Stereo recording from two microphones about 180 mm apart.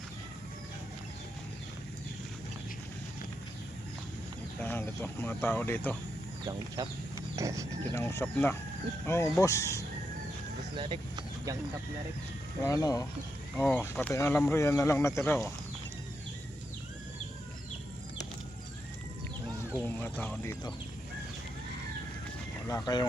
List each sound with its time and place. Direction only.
4.6 s speech: 10° left (ahead or behind)
6.7 s speech: 20° right (ahead or behind)
7.9 s speech: 15° left (ahead or behind)
10.8 s speech: 25° right (ahead or behind)
12.6 s speech: 20° left (ahead or behind)
19.8 s speech: 10° left (ahead or behind)
22.6 s speech: 20° left (ahead or behind)